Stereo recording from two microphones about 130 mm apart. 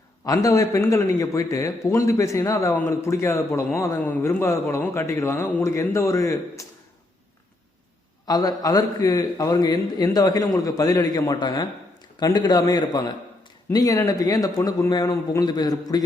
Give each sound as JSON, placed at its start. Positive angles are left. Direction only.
{"t": 0.3, "sound": "a man's voice", "side_deg": 25}
{"t": 8.3, "sound": "a man's voice", "side_deg": 30}